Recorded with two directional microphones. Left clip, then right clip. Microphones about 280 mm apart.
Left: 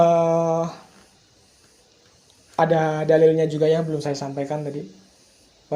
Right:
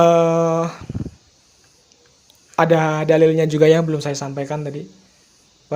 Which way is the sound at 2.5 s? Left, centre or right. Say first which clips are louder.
Right 3 dB; right.